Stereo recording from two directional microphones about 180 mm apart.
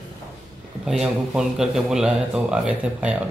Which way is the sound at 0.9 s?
Centre (ahead or behind).